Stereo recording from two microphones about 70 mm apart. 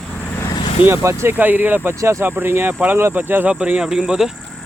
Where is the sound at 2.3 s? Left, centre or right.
Right.